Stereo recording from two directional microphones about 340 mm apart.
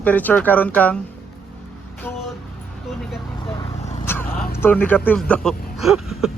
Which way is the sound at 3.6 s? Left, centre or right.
Centre.